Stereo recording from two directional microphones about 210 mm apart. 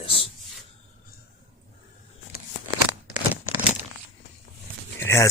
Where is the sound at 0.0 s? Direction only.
25° left (ahead or behind).